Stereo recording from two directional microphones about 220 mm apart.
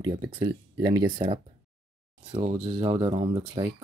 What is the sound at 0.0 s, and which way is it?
Speech, 20° right (ahead or behind).